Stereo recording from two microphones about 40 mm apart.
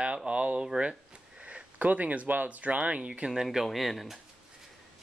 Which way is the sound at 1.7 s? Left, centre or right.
Right.